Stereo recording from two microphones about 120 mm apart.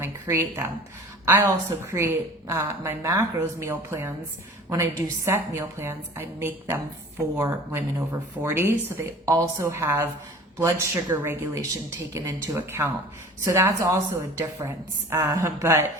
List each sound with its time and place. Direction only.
0.0 s a woman's voice: 20° right (ahead or behind)